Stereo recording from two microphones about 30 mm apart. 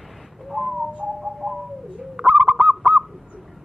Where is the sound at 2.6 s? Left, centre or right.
Centre.